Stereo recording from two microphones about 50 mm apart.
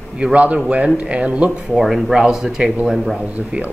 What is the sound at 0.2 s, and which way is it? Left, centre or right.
Speech, right.